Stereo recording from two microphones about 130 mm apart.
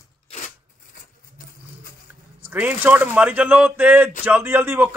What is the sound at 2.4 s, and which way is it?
A man's voice, 15° right (ahead or behind).